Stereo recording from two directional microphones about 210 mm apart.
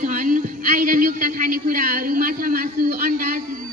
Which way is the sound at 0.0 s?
40° right (ahead or behind).